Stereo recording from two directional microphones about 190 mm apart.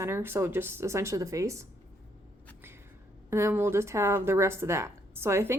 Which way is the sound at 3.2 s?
15° right (ahead or behind).